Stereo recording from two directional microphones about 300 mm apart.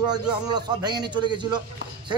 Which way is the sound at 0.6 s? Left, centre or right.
Centre.